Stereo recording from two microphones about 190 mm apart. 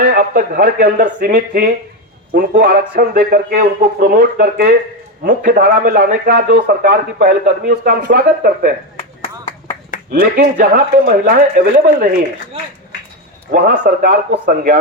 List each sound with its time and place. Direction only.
0.0 s a man's voice: 50° right (ahead or behind)
10.1 s a man's voice: 50° right (ahead or behind)
13.5 s a man's voice: 50° right (ahead or behind)